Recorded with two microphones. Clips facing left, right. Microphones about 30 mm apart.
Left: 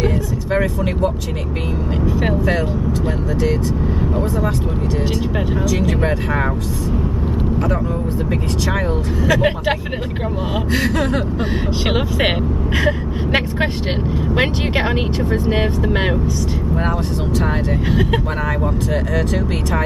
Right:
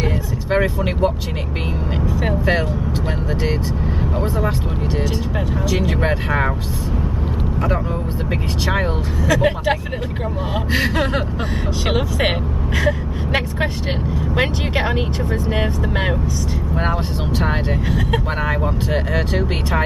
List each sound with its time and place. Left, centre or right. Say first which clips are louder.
0.0 s vehicle: left 3 dB; centre
5.7 s speech: right 1 dB; centre
9.2 s speech: even; centre
10.7 s speech: even; centre
11.9 s speech: left 1 dB; centre
16.7 s speech: even; centre
17.8 s speech: left 3 dB; centre
18.6 s speech: left 1 dB; centre